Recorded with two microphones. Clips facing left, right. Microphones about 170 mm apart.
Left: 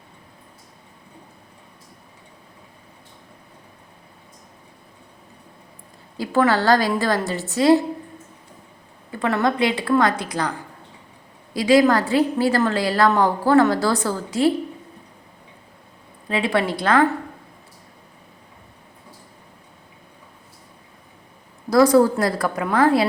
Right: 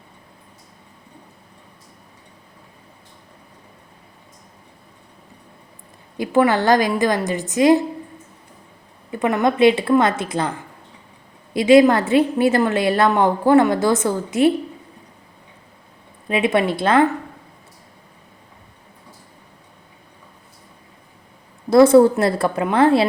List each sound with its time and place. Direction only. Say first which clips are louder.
6.1 s a woman's voice: right 2 dB; 20° right (ahead or behind)
9.1 s a woman's voice: right 3 dB; 15° right (ahead or behind)
11.5 s a woman's voice: right 4 dB; 25° right (ahead or behind)
16.3 s a woman's voice: right 3 dB; 20° right (ahead or behind)
21.7 s a woman's voice: right 4 dB; 25° right (ahead or behind)